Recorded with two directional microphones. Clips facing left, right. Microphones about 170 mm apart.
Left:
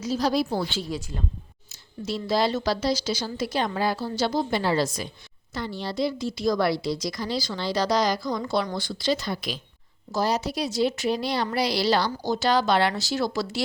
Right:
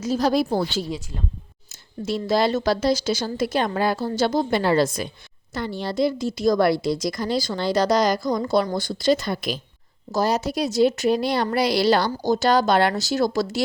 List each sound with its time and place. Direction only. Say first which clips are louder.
0.0 s a woman's voice: right 3 dB; 50° right (ahead or behind)